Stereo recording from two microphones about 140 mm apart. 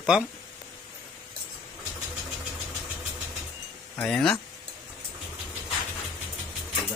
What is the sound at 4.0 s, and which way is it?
Speech, 5° left (ahead or behind).